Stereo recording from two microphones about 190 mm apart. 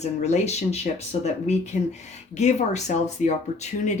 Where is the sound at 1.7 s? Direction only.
45° left (ahead or behind).